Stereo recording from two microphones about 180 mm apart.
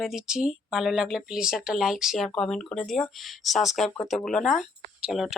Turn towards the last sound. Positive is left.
turn(degrees=0)  # may be behind; listen again after turning